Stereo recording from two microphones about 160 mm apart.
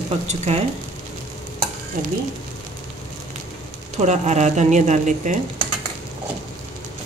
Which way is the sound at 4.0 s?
45° right (ahead or behind).